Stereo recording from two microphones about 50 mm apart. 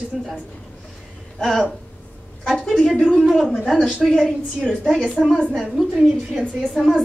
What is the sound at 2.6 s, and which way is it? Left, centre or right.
A woman's voice, centre.